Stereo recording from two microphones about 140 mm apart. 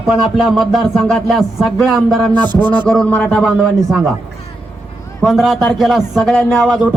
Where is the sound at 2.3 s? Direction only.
30° right (ahead or behind).